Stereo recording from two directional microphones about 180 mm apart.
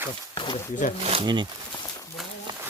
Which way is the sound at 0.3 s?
25° left (ahead or behind).